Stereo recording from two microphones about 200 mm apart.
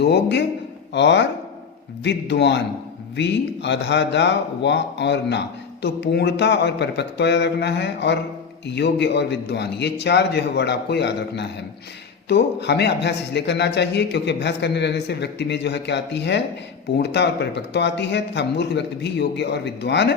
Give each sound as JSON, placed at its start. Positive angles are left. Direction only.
{"t": 0.0, "sound": "speech", "side_deg": 60}